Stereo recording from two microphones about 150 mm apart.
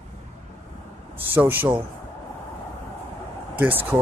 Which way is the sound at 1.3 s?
10° right (ahead or behind).